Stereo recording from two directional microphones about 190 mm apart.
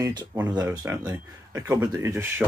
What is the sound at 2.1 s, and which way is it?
Speech, 10° right (ahead or behind).